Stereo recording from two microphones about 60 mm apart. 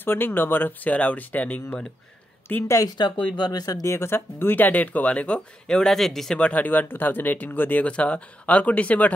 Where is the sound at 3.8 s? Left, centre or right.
Left; by 6.4 s centre.